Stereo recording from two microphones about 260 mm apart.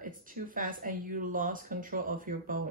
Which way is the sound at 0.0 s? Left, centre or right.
Right.